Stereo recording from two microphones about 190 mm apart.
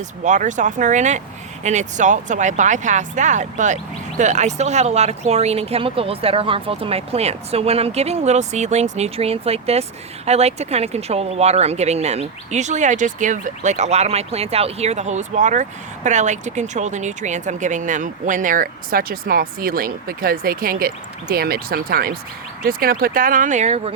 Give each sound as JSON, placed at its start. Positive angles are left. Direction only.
{"t": 0.3, "sound": "speech", "side_deg": -40}